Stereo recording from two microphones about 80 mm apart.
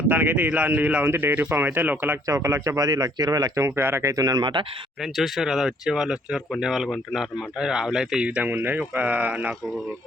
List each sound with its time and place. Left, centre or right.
0.1 s speech: right
2.2 s speech: right
4.1 s speech: right
5.1 s a man's voice: centre
8.4 s speech: right